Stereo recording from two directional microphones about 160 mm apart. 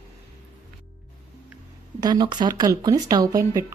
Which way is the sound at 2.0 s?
25° right (ahead or behind).